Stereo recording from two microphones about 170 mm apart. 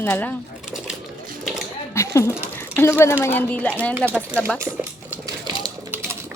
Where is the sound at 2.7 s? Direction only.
15° left (ahead or behind).